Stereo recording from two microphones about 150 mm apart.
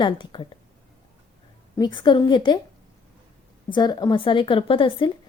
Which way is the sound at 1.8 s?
30° left (ahead or behind).